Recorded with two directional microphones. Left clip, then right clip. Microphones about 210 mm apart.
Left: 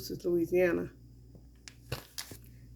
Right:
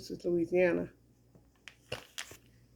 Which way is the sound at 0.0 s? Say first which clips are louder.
Left 1 dB; centre (ahead or behind).